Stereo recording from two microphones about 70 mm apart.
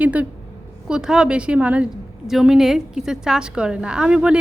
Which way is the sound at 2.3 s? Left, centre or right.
Centre.